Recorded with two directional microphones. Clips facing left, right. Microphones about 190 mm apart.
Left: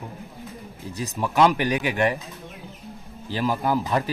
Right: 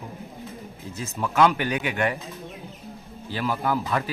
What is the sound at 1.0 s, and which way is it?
Speech, 15° left (ahead or behind).